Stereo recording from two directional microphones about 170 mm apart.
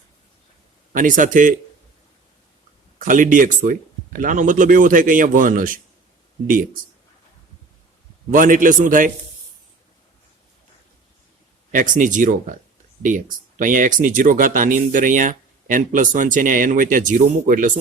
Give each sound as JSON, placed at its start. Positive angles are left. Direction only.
{"t": 0.9, "sound": "speech", "side_deg": -50}
{"t": 3.0, "sound": "speech", "side_deg": -50}
{"t": 8.3, "sound": "speech", "side_deg": -50}
{"t": 11.7, "sound": "speech", "side_deg": -50}